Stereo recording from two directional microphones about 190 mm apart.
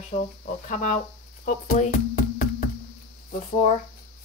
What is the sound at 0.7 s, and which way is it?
Speech, 40° left (ahead or behind).